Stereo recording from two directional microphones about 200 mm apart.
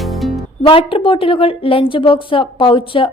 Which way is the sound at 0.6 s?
25° left (ahead or behind).